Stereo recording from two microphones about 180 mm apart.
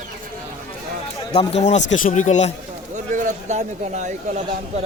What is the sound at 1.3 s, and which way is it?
Speech, 30° left (ahead or behind).